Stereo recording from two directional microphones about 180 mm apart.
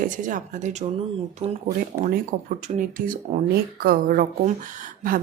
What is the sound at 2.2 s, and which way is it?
Speech, 45° right (ahead or behind).